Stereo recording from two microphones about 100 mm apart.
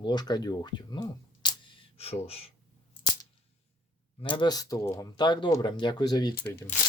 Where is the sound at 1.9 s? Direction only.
80° left.